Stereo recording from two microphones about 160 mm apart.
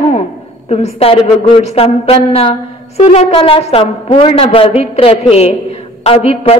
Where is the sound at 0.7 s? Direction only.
40° left (ahead or behind).